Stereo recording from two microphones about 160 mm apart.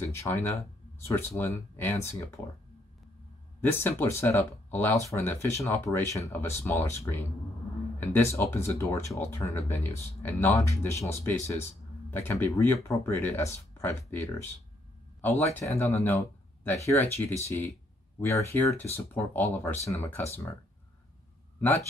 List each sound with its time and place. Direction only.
0.0 s speech: 15° left (ahead or behind)
3.6 s speech: 15° left (ahead or behind)